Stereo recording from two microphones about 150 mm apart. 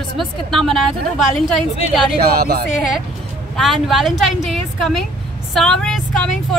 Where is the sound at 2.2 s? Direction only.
90° right.